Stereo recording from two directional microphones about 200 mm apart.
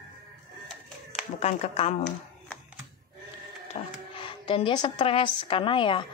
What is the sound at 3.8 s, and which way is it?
Speech, 25° left (ahead or behind).